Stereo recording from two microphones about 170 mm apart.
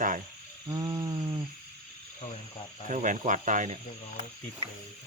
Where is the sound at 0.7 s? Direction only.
20° right (ahead or behind).